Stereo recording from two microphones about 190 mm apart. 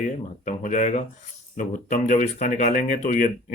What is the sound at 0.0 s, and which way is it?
Speech, 40° left (ahead or behind).